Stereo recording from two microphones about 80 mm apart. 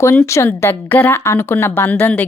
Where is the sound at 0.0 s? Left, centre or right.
Left.